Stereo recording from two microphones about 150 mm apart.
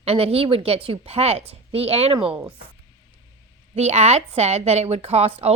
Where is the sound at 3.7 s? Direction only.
45° right (ahead or behind).